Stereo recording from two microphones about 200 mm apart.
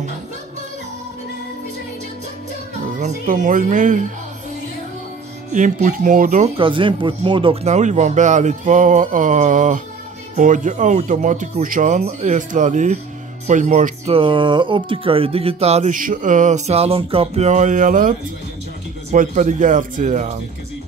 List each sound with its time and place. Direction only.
3.0 s speech: 40° right (ahead or behind)
5.5 s speech: 40° right (ahead or behind)
19.1 s speech: 40° right (ahead or behind)